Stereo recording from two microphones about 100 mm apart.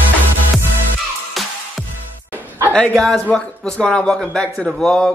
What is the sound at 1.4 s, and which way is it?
Music, centre (ahead or behind).